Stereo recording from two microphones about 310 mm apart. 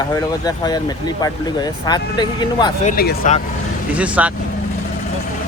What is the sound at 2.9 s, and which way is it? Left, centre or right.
Speech, left.